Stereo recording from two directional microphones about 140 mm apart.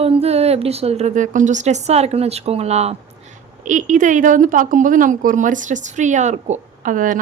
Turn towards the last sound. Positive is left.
turn(degrees=-70)  # may be behind; listen again after turning